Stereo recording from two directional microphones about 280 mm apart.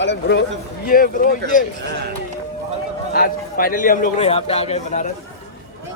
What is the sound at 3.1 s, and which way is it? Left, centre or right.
A man's voice, left.